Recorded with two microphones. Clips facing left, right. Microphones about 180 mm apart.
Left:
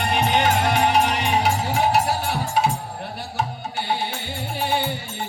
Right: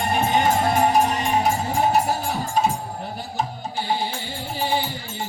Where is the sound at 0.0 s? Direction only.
75° left (ahead or behind).